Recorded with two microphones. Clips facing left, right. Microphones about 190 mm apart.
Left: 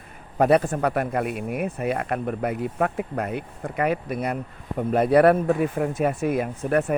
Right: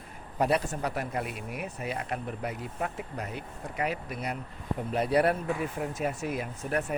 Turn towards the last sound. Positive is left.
turn(degrees=55)  # may be behind; listen again after turning